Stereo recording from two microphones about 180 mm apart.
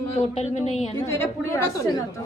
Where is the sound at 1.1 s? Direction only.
15° left (ahead or behind).